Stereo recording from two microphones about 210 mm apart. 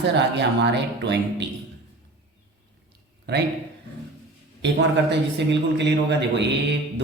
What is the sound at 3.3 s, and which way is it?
Speech, 50° right (ahead or behind).